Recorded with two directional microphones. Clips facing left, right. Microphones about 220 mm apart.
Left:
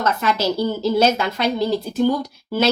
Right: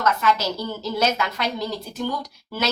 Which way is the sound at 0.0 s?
30° left (ahead or behind).